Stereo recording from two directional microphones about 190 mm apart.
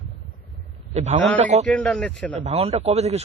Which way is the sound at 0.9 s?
35° right (ahead or behind).